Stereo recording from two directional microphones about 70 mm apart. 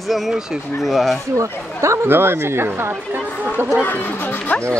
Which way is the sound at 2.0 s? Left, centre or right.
Right.